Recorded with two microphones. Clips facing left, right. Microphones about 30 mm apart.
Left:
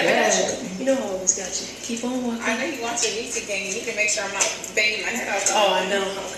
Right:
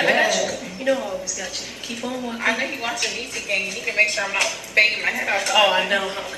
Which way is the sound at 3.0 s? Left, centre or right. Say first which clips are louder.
Even; right.